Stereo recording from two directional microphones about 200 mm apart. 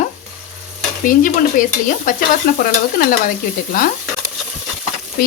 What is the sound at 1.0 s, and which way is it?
Frying, 45° left (ahead or behind).